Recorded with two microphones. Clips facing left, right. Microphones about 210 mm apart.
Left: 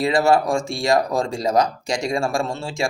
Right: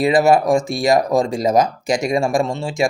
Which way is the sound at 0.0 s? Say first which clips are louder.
Right 4 dB; 20° right (ahead or behind).